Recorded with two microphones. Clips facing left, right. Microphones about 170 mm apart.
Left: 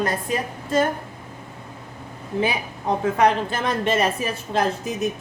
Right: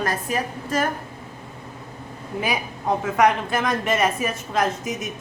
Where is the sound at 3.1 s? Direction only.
30° left (ahead or behind).